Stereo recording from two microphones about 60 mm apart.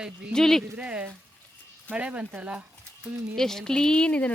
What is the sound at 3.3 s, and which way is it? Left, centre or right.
Speech, centre.